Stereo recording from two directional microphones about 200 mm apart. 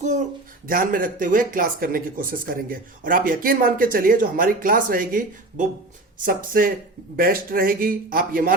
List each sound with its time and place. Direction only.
0.0 s speech: 35° right (ahead or behind)